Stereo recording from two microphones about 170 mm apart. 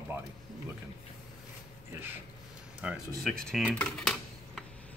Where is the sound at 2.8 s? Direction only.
5° right (ahead or behind).